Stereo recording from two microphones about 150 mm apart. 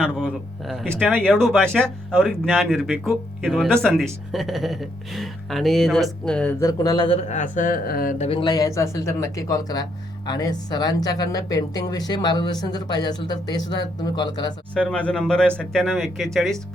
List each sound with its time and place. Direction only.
0.0 s a sound: 5° left (ahead or behind)
0.9 s speech: centre (ahead or behind)
6.6 s speech: 25° left (ahead or behind)
7.2 s speech: 55° left (ahead or behind); by 8.1 s 75° left (ahead or behind)
8.2 s speech: 40° left (ahead or behind)
14.8 s speech: 10° left (ahead or behind)